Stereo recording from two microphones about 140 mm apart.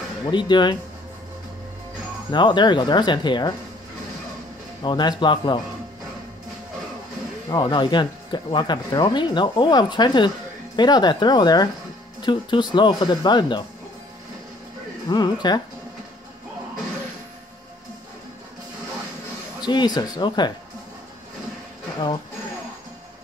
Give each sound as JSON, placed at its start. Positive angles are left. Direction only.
{"t": 0.3, "sound": "speech", "side_deg": 35}
{"t": 2.3, "sound": "speech", "side_deg": 35}
{"t": 4.8, "sound": "speech", "side_deg": 35}
{"t": 7.4, "sound": "speech", "side_deg": 30}
{"t": 15.0, "sound": "speech", "side_deg": 30}
{"t": 19.6, "sound": "speech", "side_deg": 30}